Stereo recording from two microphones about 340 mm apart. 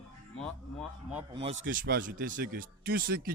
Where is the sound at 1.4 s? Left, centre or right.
Right.